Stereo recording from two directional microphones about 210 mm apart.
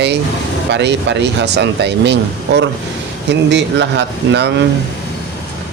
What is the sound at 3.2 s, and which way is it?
Speech, 55° right (ahead or behind).